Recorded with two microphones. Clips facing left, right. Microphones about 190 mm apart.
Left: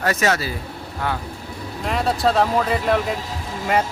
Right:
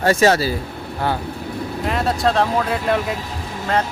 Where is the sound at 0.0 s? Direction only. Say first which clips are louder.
Right 5 dB; 30° right (ahead or behind).